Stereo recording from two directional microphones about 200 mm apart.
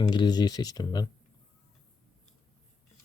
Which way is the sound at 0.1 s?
20° left (ahead or behind).